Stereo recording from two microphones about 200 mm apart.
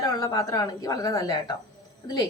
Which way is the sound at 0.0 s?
15° left (ahead or behind).